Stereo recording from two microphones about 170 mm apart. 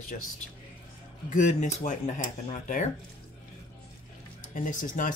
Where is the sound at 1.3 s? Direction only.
45° left (ahead or behind).